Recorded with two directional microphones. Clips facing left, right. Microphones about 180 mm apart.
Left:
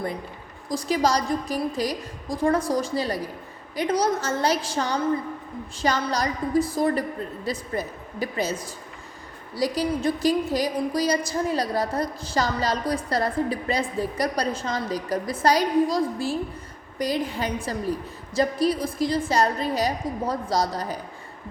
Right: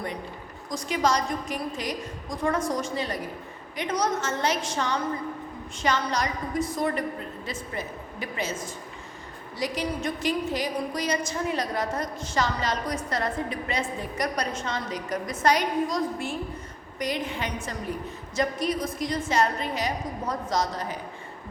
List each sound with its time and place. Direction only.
0.7 s a woman's voice: 35° left (ahead or behind)